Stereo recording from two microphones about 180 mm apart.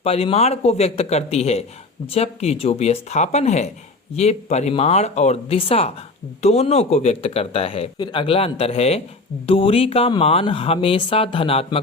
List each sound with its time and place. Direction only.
0.0 s speech: 35° left (ahead or behind)